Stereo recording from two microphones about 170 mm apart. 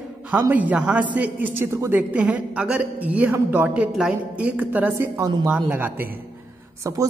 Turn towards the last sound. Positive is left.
turn(degrees=-20)  # may be behind; listen again after turning